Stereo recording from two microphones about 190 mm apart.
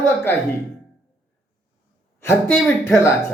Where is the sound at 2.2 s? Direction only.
15° left (ahead or behind).